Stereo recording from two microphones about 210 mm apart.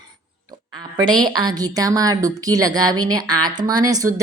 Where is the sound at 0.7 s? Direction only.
20° right (ahead or behind).